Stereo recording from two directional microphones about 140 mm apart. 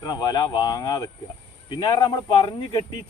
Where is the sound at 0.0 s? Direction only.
30° left (ahead or behind).